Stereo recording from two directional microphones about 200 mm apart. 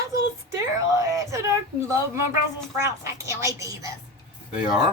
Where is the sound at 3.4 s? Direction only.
15° right (ahead or behind).